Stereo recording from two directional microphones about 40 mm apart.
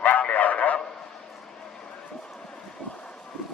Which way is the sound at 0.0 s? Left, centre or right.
Left.